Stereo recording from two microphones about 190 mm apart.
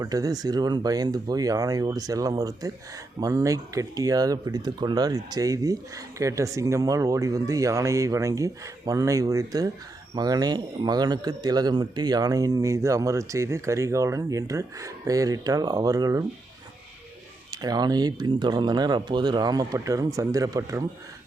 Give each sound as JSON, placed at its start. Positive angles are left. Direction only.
{"t": 0.0, "sound": "speech", "side_deg": -20}
{"t": 17.5, "sound": "speech", "side_deg": -20}